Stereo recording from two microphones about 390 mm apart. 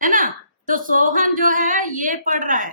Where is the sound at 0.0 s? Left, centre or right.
Centre.